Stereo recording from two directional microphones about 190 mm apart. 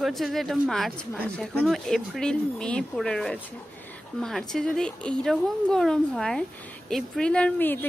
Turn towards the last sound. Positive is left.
turn(degrees=10)  # may be behind; listen again after turning